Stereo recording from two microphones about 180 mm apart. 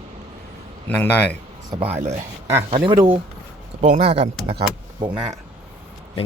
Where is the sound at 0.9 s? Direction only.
10° left (ahead or behind).